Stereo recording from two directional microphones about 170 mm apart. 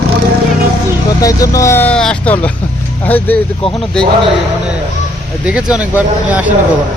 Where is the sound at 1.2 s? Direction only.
20° left (ahead or behind).